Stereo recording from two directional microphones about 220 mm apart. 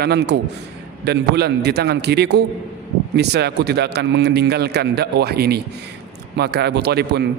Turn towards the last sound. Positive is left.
turn(degrees=-50)  # may be behind; listen again after turning